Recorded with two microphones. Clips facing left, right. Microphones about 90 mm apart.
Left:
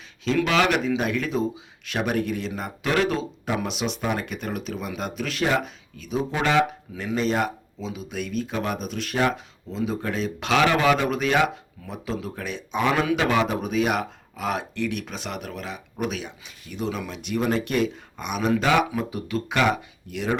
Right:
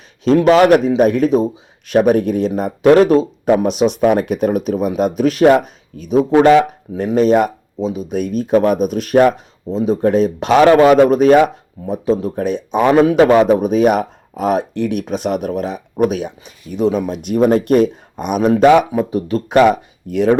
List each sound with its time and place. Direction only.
0.3 s speech: 40° right (ahead or behind)